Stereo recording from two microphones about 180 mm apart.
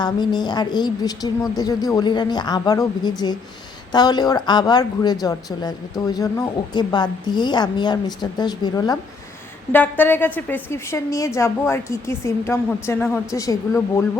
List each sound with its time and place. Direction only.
0.0 s a woman's voice: 25° left (ahead or behind)
9.7 s a woman's voice: 10° left (ahead or behind)